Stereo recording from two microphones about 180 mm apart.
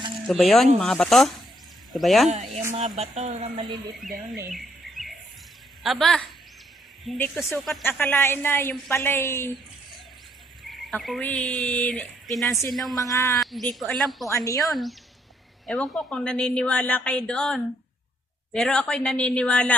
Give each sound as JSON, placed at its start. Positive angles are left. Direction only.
{"t": 0.3, "sound": "speech", "side_deg": 0}
{"t": 2.9, "sound": "speech", "side_deg": -40}
{"t": 4.5, "sound": "a sound", "side_deg": 0}
{"t": 5.8, "sound": "speech", "side_deg": 0}
{"t": 7.9, "sound": "a woman's voice", "side_deg": 10}
{"t": 10.7, "sound": "speech", "side_deg": 0}
{"t": 13.0, "sound": "speech", "side_deg": 20}
{"t": 13.3, "sound": "speech", "side_deg": 0}
{"t": 14.3, "sound": "a woman's voice", "side_deg": 20}
{"t": 14.6, "sound": "speech", "side_deg": 0}